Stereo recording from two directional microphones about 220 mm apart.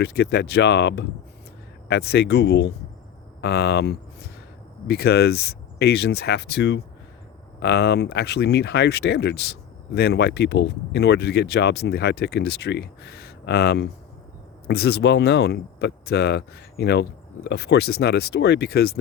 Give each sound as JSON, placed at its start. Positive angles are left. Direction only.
{"t": 0.0, "sound": "speech", "side_deg": 50}